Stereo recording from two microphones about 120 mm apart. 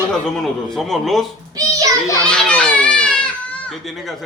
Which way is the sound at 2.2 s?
10° left (ahead or behind).